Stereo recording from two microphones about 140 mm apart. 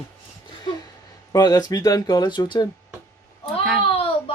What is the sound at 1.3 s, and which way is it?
Speech, 25° left (ahead or behind).